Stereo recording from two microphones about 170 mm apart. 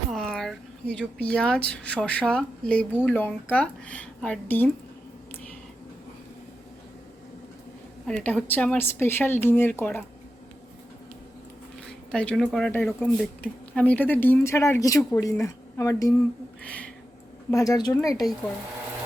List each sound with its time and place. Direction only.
0.1 s speech: centre (ahead or behind)
8.0 s speech: 5° left (ahead or behind)
12.1 s speech: 5° left (ahead or behind)
16.6 s a sound: 5° left (ahead or behind)
17.5 s speech: 20° left (ahead or behind)